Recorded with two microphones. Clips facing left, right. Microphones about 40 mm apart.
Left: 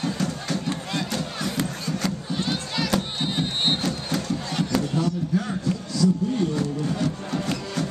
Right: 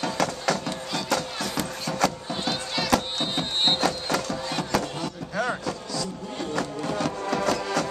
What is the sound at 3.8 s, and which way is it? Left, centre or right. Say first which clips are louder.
Music: right 2 dB; right.